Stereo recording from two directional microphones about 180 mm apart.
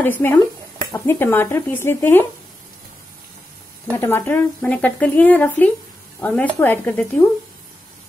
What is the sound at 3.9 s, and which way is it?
Speech, 10° left (ahead or behind).